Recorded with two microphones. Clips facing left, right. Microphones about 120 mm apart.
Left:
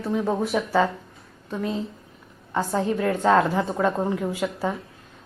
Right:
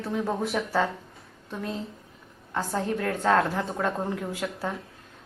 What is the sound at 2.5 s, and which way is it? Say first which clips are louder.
A woman's voice: left 4 dB; 10° left (ahead or behind).